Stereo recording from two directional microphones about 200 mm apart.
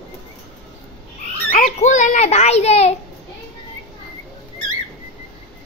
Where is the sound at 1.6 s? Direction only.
40° left (ahead or behind).